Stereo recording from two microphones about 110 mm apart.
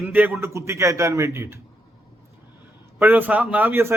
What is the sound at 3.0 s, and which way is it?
Speech, 15° right (ahead or behind).